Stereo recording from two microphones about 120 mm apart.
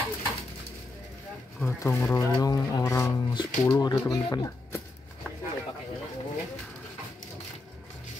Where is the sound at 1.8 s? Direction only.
25° left (ahead or behind).